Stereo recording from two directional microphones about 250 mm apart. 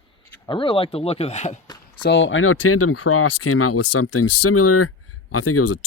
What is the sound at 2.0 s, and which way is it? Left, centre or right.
Speech, left.